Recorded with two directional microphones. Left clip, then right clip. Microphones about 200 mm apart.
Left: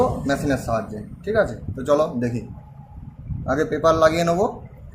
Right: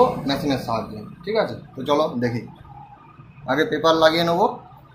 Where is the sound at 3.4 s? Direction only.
30° left (ahead or behind).